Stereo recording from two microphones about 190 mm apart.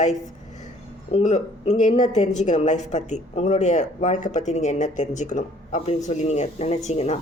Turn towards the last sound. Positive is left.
turn(degrees=35)  # may be behind; listen again after turning